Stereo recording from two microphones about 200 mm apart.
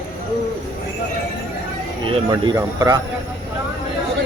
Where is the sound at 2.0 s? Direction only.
20° right (ahead or behind).